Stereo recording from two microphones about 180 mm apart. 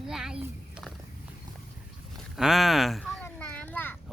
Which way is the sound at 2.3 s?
Centre (ahead or behind).